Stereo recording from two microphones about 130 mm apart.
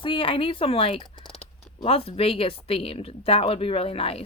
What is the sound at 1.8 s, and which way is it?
Speech, 50° left (ahead or behind).